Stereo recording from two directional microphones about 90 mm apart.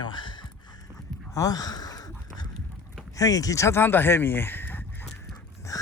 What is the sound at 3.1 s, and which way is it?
Speech, 40° left (ahead or behind).